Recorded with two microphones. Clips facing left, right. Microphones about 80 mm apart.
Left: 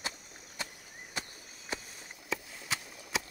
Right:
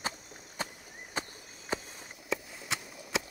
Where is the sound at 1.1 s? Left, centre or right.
Right.